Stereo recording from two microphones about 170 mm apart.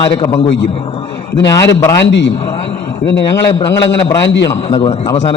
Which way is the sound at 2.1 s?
90° left.